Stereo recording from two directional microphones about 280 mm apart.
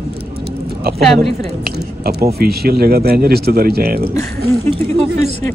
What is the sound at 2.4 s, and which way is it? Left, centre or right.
Speech, right.